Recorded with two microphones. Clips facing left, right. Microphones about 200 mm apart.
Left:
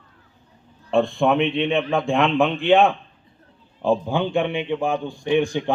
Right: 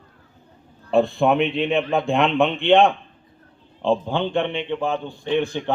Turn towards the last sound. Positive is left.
turn(degrees=15)  # may be behind; listen again after turning